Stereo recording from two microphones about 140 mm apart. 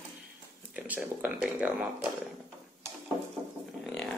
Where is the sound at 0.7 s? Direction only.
10° right (ahead or behind).